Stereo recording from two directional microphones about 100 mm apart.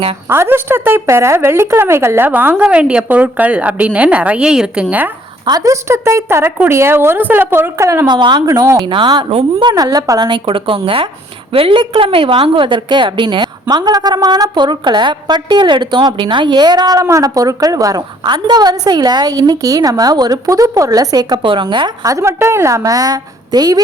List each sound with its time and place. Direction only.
0.3 s a woman's voice: 25° right (ahead or behind)
5.5 s a woman's voice: 35° right (ahead or behind)
8.0 s a woman's voice: 45° right (ahead or behind)
8.9 s a woman's voice: 55° right (ahead or behind)
9.7 s a woman's voice: 40° right (ahead or behind)
18.3 s a woman's voice: 45° right (ahead or behind)
21.4 s a woman's voice: 55° right (ahead or behind)
22.0 s a woman's voice: 30° right (ahead or behind)